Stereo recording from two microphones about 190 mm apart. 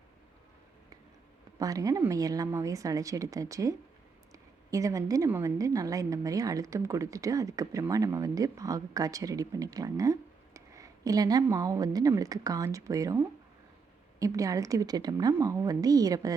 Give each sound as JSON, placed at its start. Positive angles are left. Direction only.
{"t": 1.5, "sound": "a woman's voice", "side_deg": -20}